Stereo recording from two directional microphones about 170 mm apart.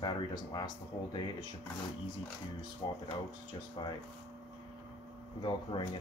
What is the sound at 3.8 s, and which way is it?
Speech, 25° left (ahead or behind).